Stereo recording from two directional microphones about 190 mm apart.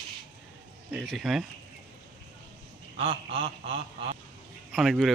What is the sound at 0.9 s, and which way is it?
Speech, centre (ahead or behind).